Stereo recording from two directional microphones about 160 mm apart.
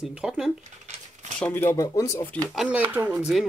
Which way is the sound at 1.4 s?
15° left (ahead or behind).